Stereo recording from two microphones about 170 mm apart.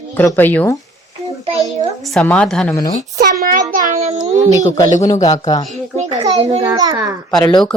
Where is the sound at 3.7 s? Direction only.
50° right (ahead or behind).